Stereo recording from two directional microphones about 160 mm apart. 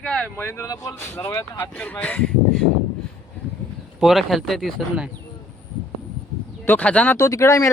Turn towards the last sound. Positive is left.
turn(degrees=20)  # may be behind; listen again after turning